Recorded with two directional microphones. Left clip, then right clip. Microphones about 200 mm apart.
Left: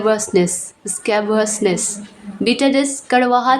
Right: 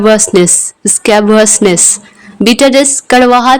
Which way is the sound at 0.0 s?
40° right (ahead or behind).